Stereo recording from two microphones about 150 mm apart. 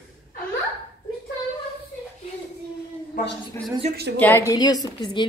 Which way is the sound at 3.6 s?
15° left (ahead or behind).